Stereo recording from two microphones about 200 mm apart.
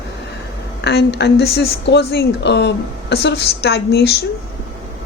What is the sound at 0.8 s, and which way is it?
A woman's voice, 60° left (ahead or behind).